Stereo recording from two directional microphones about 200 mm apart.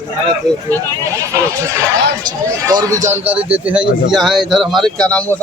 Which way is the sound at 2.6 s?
15° right (ahead or behind).